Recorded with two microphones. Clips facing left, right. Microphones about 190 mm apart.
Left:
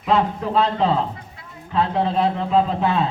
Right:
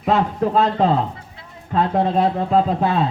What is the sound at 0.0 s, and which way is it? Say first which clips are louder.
A man's voice: right 2 dB; 45° right (ahead or behind).